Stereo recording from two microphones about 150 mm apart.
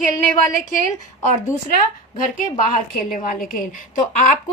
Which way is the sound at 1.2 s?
60° left (ahead or behind).